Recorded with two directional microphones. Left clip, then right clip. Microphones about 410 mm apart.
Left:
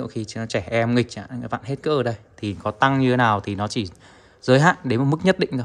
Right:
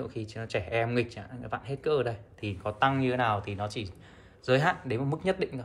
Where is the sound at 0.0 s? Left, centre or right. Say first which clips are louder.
Left 7 dB; centre.